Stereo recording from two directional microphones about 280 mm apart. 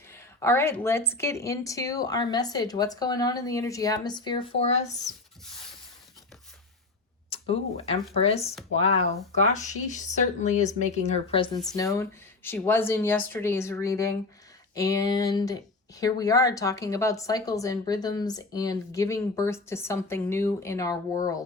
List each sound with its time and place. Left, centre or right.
0.1 s a woman's voice: centre
7.3 s a woman's voice: left